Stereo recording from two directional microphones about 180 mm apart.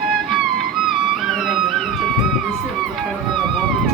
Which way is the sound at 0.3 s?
Centre (ahead or behind).